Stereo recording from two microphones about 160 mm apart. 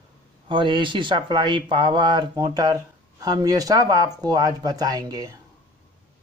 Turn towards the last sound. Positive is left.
turn(degrees=-25)  # may be behind; listen again after turning